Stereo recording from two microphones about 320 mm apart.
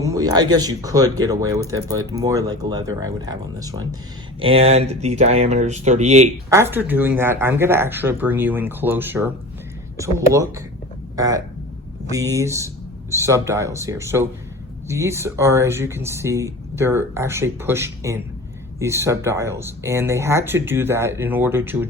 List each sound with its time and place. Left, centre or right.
0.0 s speech: centre
6.5 s speech: centre